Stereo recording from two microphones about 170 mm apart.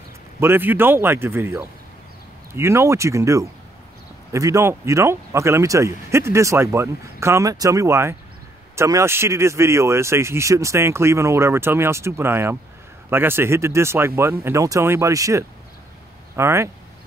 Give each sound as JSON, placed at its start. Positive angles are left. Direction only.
{"t": 0.4, "sound": "speech", "side_deg": -10}